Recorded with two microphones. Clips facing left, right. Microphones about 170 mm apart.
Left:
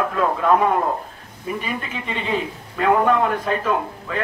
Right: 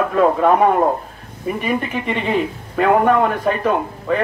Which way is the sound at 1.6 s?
60° right (ahead or behind).